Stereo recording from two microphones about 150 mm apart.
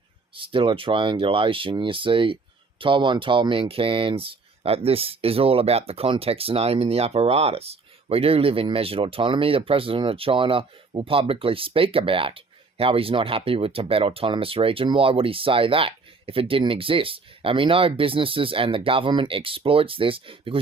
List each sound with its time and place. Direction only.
0.3 s speech: 35° right (ahead or behind)